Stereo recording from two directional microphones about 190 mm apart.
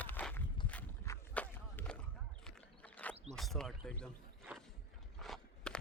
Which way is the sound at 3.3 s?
Centre (ahead or behind).